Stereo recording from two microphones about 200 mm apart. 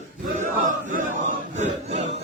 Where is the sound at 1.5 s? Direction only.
35° right (ahead or behind).